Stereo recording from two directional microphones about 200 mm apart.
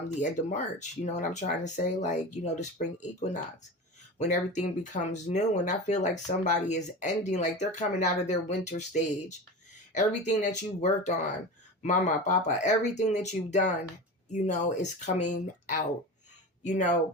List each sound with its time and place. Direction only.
0.2 s speech: 35° left (ahead or behind)